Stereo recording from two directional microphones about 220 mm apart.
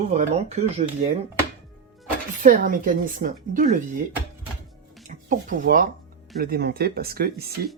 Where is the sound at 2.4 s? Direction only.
40° right (ahead or behind).